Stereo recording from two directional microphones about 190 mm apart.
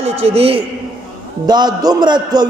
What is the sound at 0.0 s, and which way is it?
A man's voice, 30° right (ahead or behind).